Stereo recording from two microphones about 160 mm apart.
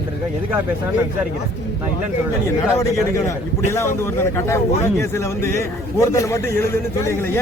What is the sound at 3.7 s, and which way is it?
A man's voice, 15° left (ahead or behind).